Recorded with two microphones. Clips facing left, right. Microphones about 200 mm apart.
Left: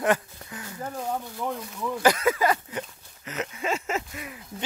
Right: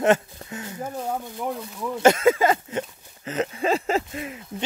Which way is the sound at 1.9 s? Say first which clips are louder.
Right 5 dB; 25° right (ahead or behind).